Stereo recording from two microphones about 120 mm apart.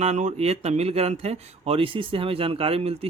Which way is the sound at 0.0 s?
70° right (ahead or behind).